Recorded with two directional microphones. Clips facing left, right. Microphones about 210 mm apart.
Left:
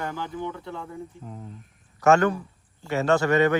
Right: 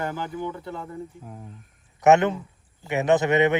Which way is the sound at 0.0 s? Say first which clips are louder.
Right 2 dB; 10° right (ahead or behind).